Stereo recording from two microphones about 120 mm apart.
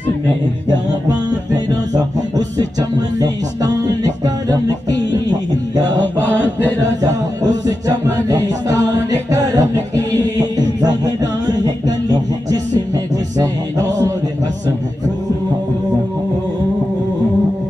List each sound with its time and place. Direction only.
1.7 s music: 35° right (ahead or behind)
5.9 s mantra: 15° left (ahead or behind)
8.3 s music: 30° right (ahead or behind)
10.8 s music: 35° right (ahead or behind)